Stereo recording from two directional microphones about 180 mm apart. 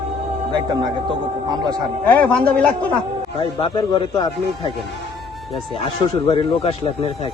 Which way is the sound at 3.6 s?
25° left (ahead or behind).